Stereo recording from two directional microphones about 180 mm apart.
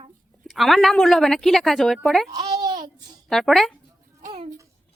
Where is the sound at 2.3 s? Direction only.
25° right (ahead or behind).